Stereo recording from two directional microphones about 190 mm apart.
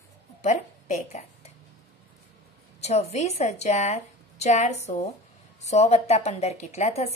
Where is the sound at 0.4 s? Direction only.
40° left (ahead or behind).